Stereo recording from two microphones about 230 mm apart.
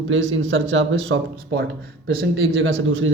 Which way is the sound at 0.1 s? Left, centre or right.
Right.